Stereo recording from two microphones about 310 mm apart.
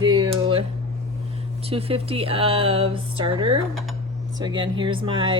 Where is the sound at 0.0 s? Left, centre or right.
Centre.